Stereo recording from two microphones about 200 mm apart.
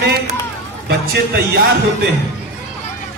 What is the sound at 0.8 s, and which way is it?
Music, 50° right (ahead or behind).